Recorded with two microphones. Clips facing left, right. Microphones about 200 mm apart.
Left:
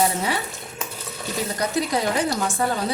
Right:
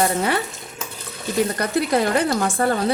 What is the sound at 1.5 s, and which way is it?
Speech, 60° right (ahead or behind).